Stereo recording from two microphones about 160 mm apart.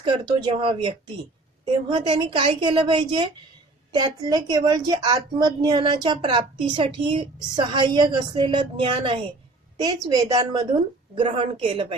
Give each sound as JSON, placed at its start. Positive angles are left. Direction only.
{"t": 0.0, "sound": "a woman's voice", "side_deg": -25}